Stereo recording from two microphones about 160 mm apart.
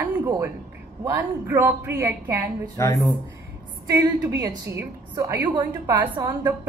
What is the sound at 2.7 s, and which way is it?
Speech, 20° left (ahead or behind).